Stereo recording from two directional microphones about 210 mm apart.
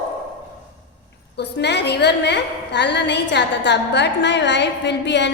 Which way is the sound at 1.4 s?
55° left (ahead or behind).